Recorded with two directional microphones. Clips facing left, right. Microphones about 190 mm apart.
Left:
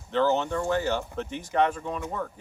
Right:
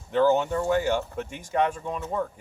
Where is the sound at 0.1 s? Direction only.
15° right (ahead or behind).